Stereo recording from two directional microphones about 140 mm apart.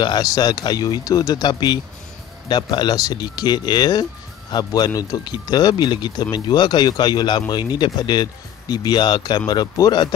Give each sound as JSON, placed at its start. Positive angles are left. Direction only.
{"t": 0.0, "sound": "speech", "side_deg": 30}